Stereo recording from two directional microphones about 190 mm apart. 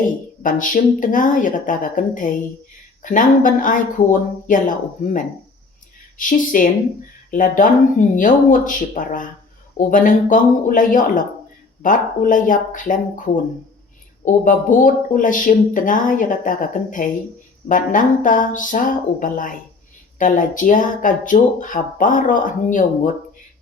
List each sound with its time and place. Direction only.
0.4 s speech: 45° left (ahead or behind)
6.1 s speech: 45° left (ahead or behind)
14.4 s speech: 45° left (ahead or behind)